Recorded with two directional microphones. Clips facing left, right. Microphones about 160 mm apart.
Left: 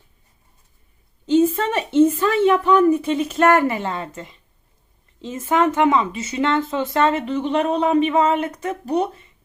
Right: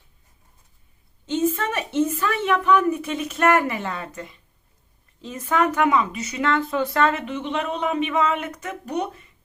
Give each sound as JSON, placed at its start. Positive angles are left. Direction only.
{"t": 1.3, "sound": "a woman's voice", "side_deg": 30}